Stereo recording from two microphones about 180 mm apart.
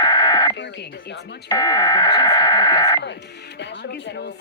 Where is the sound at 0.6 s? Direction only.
75° left (ahead or behind).